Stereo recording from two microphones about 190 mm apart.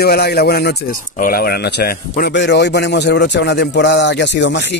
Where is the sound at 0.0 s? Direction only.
60° left (ahead or behind).